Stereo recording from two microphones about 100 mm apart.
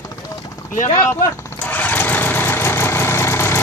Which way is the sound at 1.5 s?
20° left (ahead or behind).